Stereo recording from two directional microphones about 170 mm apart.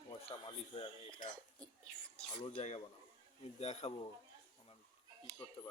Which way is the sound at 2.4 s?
40° left (ahead or behind).